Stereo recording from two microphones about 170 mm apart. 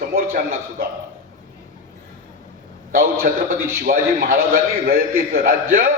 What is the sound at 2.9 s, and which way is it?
A man's voice, 60° right (ahead or behind).